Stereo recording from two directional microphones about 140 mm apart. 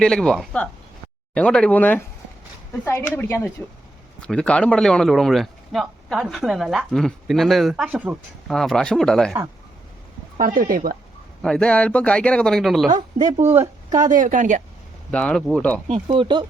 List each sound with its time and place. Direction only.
0.0 s speech: 5° left (ahead or behind)
3.2 s speech: 15° left (ahead or behind); by 8.2 s 10° right (ahead or behind)
8.4 s speech: 5° left (ahead or behind)
10.3 s speech: 80° right
11.4 s speech: 5° left (ahead or behind)
13.4 s a woman's voice: 15° right (ahead or behind)
14.0 s speech: 75° right (ahead or behind)
15.1 s speech: 10° left (ahead or behind)
15.9 s speech: 35° right (ahead or behind)